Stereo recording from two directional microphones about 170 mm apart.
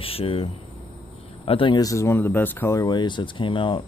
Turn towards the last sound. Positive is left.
turn(degrees=30)  # may be behind; listen again after turning